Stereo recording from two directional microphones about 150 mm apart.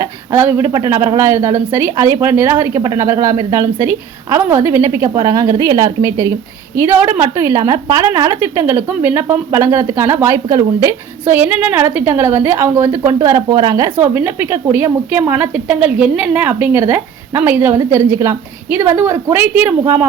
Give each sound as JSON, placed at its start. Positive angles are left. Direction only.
{"t": 0.0, "sound": "a woman's voice", "side_deg": -20}
{"t": 13.9, "sound": "a woman's voice", "side_deg": -15}